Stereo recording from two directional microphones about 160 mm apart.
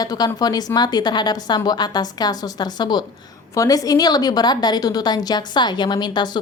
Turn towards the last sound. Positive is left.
turn(degrees=25)  # may be behind; listen again after turning